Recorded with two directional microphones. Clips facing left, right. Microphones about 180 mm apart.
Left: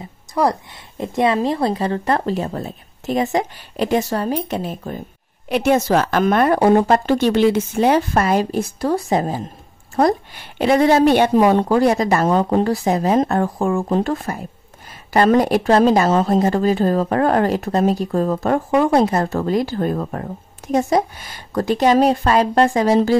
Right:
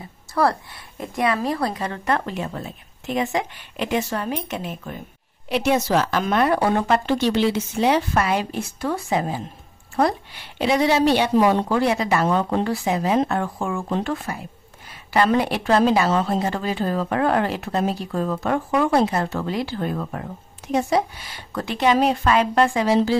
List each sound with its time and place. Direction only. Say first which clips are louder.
0.0 s a woman's voice: left 2 dB; 15° left (ahead or behind); by 5.0 s 35° left (ahead or behind)
5.5 s a woman's voice: left 4 dB; 50° left (ahead or behind)